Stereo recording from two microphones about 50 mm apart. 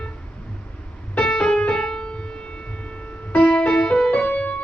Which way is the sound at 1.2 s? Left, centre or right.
Centre.